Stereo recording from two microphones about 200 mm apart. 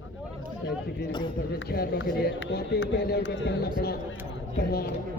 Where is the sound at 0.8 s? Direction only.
60° left (ahead or behind).